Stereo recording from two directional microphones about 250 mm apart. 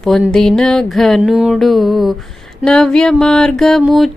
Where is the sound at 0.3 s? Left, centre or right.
Centre.